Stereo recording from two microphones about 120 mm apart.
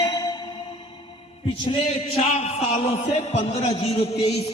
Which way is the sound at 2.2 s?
60° left (ahead or behind).